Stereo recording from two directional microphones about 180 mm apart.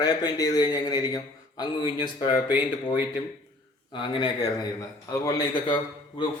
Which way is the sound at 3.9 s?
25° left (ahead or behind).